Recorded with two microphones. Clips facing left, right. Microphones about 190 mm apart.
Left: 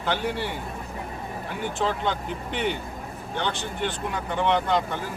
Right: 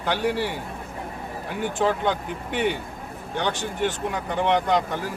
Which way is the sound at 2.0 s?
15° right (ahead or behind).